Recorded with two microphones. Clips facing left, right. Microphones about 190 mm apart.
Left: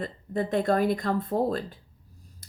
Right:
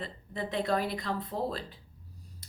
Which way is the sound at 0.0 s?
50° left (ahead or behind).